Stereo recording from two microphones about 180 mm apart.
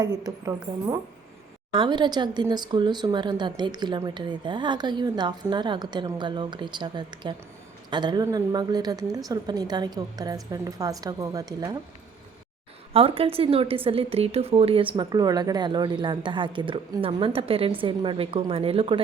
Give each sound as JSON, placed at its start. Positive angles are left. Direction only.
{"t": 0.0, "sound": "a woman's voice", "side_deg": -20}
{"t": 12.9, "sound": "a woman's voice", "side_deg": -30}